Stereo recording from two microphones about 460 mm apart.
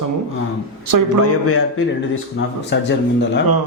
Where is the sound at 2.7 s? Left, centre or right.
Left.